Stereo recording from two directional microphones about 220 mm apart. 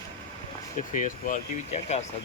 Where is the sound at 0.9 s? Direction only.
35° left (ahead or behind).